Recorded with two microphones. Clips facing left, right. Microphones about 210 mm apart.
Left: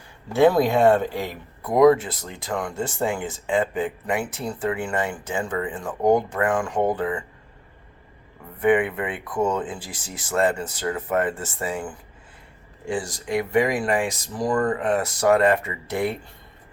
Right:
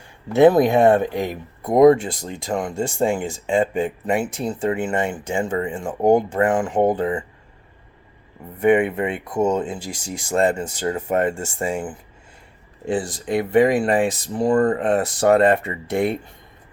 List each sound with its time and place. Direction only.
0.3 s speech: 20° right (ahead or behind)
8.6 s speech: 25° right (ahead or behind)
13.2 s speech: 30° right (ahead or behind)